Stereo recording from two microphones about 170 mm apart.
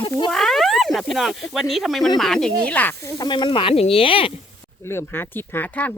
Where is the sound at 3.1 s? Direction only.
25° left (ahead or behind).